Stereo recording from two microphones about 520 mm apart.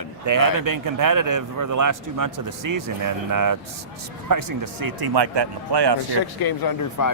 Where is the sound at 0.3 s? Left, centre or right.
Right.